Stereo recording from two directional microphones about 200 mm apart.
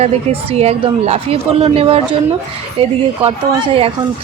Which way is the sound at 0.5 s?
30° right (ahead or behind).